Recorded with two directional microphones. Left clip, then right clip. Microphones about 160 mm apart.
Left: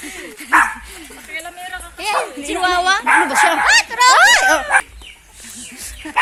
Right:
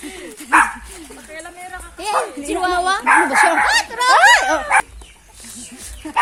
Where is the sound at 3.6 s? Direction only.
35° right (ahead or behind).